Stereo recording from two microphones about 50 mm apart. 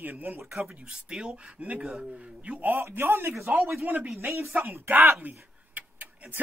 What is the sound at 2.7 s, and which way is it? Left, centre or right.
A man's voice, right.